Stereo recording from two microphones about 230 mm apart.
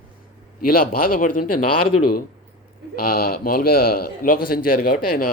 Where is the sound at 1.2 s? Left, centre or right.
Left.